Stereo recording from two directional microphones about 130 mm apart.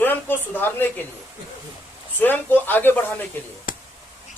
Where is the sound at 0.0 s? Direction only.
15° left (ahead or behind).